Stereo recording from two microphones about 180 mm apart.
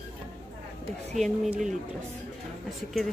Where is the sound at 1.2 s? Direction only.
5° right (ahead or behind).